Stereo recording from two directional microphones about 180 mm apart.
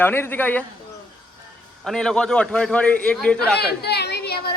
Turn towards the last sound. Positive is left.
turn(degrees=65)  # may be behind; listen again after turning